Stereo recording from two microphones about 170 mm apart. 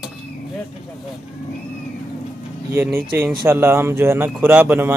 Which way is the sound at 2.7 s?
15° right (ahead or behind).